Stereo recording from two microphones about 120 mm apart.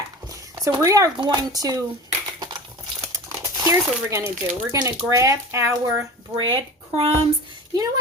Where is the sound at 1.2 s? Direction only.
35° right (ahead or behind).